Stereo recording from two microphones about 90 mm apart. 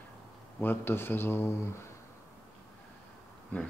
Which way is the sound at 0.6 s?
25° left (ahead or behind).